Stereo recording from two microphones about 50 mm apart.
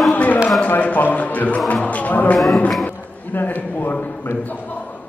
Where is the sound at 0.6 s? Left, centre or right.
Left.